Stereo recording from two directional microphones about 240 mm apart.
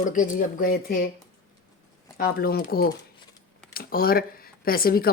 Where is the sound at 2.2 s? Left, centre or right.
Left.